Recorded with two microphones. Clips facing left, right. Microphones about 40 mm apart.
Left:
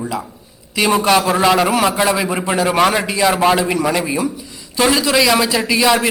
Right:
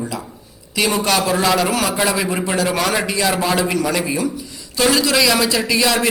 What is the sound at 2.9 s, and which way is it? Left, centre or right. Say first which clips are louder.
A man's voice: left 3 dB; centre.